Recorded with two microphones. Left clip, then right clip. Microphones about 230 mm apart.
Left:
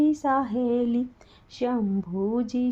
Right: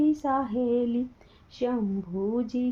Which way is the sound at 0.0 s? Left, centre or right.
Left.